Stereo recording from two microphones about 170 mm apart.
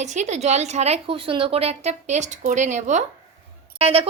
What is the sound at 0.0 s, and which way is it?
A woman's voice, 45° right (ahead or behind).